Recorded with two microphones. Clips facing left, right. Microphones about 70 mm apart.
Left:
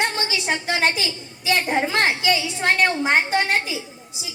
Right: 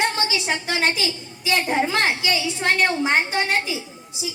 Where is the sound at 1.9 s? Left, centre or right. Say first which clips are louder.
Left 1 dB; left.